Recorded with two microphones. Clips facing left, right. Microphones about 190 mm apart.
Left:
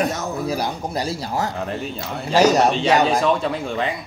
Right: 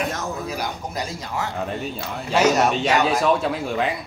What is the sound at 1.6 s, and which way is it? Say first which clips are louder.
Speech: left 1 dB; centre (ahead or behind).